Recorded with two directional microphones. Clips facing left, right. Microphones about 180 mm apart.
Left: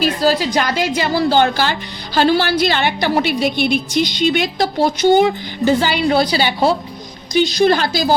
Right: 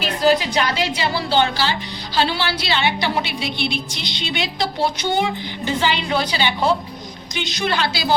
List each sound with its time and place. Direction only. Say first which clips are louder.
0.0 s a woman's voice: left 2 dB; 40° left (ahead or behind)